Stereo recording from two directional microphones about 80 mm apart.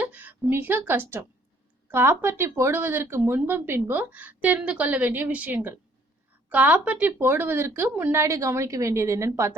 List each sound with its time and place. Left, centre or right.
0.0 s a woman's voice: right
8.1 s a woman's voice: right